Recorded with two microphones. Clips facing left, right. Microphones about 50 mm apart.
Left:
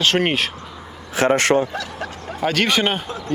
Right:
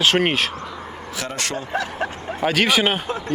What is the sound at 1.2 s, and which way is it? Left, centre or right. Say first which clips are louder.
Speech: left 12 dB; left.